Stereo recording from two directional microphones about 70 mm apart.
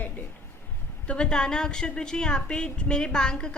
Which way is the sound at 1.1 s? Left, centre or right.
Centre.